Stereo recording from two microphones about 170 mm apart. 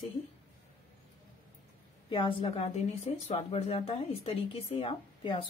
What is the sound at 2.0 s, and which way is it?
Speech, 30° left (ahead or behind).